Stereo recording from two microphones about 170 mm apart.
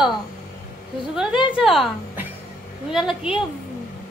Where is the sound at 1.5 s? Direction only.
Centre (ahead or behind).